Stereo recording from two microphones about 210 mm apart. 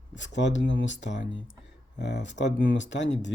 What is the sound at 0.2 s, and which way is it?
Speech, 60° left (ahead or behind).